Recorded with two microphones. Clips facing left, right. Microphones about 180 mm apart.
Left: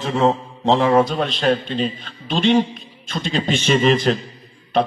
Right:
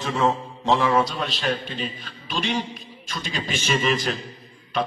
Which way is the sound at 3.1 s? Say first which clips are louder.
Left 8 dB; 50° left (ahead or behind).